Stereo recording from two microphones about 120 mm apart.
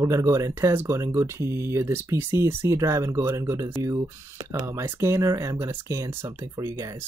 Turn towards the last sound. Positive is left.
turn(degrees=-25)  # may be behind; listen again after turning